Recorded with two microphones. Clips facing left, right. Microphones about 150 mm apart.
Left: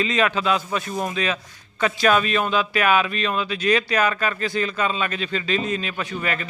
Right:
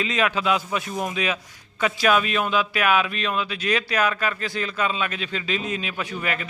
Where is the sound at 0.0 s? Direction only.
5° right (ahead or behind).